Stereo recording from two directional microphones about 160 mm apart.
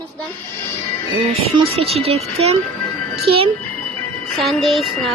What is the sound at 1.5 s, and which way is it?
Speech, 35° right (ahead or behind).